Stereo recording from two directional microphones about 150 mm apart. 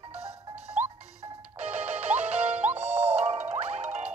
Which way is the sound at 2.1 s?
45° right (ahead or behind).